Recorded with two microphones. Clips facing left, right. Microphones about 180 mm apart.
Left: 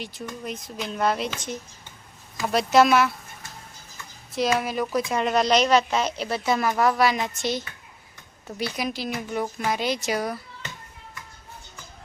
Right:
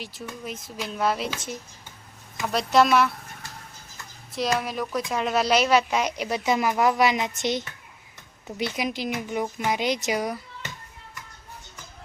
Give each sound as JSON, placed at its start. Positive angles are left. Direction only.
{"t": 0.0, "sound": "speech", "side_deg": 0}
{"t": 4.5, "sound": "speech", "side_deg": 0}